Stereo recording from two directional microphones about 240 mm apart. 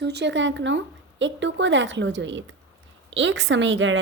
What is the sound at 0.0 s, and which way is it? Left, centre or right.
A woman's voice, right.